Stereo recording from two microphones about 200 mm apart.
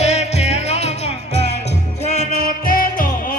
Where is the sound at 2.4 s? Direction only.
45° left (ahead or behind).